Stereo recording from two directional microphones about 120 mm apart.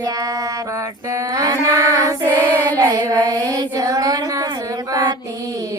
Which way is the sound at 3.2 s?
30° right (ahead or behind).